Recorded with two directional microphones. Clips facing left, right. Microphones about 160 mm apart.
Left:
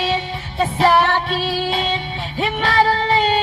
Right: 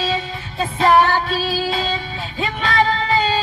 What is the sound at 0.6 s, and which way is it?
Music, 30° left (ahead or behind).